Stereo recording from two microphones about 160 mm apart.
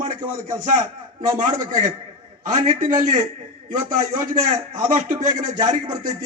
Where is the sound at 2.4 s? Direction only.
45° right (ahead or behind).